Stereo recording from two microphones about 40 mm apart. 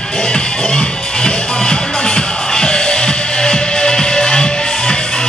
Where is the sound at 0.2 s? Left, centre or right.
Left.